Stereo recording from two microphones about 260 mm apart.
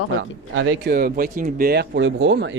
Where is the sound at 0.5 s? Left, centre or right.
Right.